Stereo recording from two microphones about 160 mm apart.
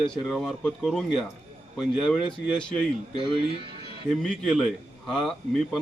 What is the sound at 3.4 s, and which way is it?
Speech, 35° right (ahead or behind).